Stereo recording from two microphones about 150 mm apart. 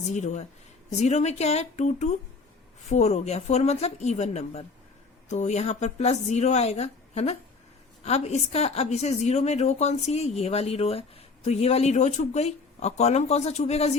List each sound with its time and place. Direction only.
0.1 s a woman's voice: 50° left (ahead or behind)